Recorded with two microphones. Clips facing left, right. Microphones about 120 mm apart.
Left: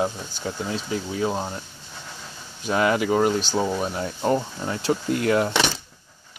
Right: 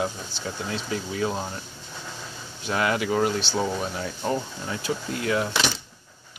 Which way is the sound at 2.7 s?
35° left (ahead or behind).